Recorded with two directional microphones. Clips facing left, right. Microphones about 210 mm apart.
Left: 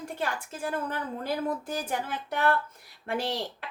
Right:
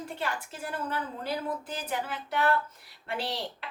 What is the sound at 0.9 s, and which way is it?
Speech, 50° left (ahead or behind).